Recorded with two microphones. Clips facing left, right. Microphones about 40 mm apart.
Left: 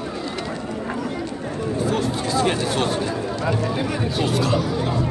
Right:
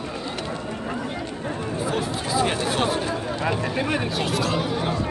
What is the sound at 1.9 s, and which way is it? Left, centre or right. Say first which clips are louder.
Speech: even; centre.